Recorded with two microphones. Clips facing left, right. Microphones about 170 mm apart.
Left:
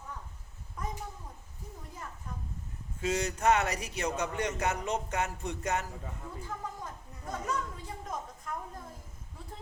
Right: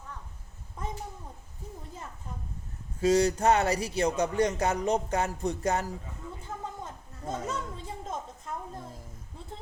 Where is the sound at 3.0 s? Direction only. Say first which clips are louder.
Right 7 dB; 35° right (ahead or behind).